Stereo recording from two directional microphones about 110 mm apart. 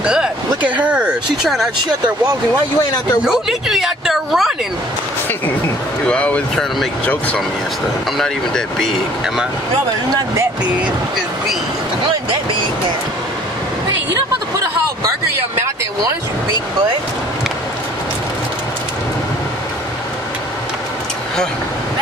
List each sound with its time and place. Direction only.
0.0 s speech: 10° right (ahead or behind)
3.3 s a woman's voice: 5° right (ahead or behind)
6.0 s speech: 10° left (ahead or behind)
8.2 s a woman's voice: 5° left (ahead or behind)
15.0 s a sound: 25° right (ahead or behind)